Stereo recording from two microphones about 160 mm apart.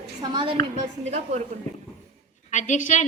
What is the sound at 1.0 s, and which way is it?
Speech, 45° right (ahead or behind).